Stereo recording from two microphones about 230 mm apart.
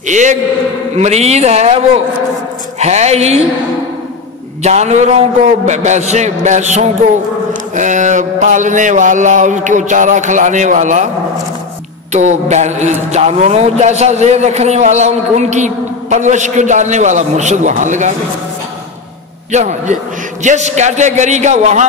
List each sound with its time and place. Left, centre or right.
0.0 s a man's voice: right
2.8 s a man's voice: right
4.6 s a man's voice: right
12.1 s a man's voice: right
19.5 s a man's voice: right